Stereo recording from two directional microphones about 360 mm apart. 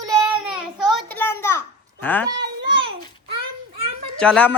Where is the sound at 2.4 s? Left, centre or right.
Centre.